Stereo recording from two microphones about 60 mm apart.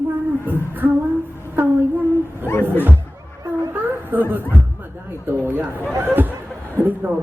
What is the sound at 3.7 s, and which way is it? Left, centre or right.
Speech, right.